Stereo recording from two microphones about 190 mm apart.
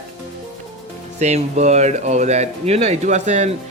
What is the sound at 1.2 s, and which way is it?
Speech, 35° right (ahead or behind).